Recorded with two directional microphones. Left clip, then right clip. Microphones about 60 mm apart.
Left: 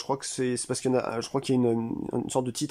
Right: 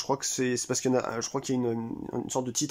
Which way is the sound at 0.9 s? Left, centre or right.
Centre.